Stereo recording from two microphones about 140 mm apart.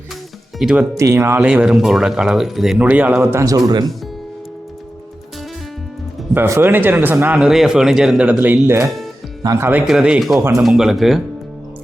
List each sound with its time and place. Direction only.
0.6 s speech: 5° right (ahead or behind)
0.9 s speech: 20° right (ahead or behind)
6.3 s speech: 15° right (ahead or behind)
9.8 s speech: 5° right (ahead or behind)